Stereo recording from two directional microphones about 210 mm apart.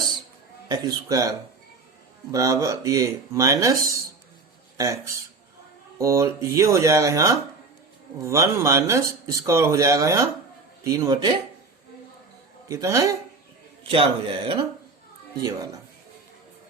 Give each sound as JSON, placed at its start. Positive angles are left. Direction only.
{"t": 0.7, "sound": "speech", "side_deg": -20}
{"t": 12.6, "sound": "speech", "side_deg": -15}
{"t": 13.8, "sound": "a man's voice", "side_deg": -25}